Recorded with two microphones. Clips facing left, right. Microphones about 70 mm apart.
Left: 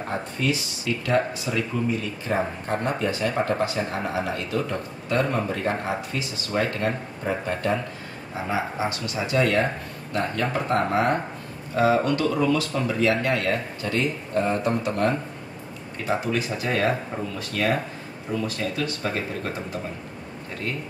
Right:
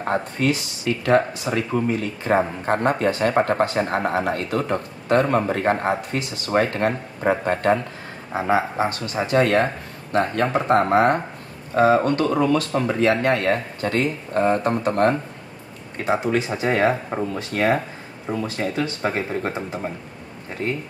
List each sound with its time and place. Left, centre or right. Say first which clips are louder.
0.0 s speech: right 5 dB; right
16.0 s speech: right 4 dB; right